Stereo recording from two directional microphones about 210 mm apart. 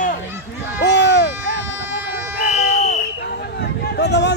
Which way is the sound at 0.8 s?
55° left (ahead or behind).